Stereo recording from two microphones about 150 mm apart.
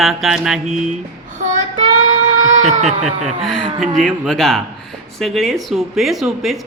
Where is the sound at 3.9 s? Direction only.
Centre (ahead or behind).